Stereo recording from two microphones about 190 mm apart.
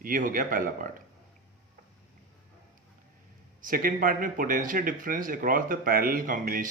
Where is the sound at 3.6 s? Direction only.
50° right (ahead or behind).